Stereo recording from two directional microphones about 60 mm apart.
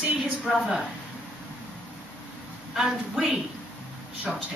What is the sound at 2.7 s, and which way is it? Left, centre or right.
Speech, centre.